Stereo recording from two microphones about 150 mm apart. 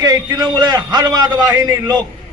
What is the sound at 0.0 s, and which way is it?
A man's voice, 25° right (ahead or behind).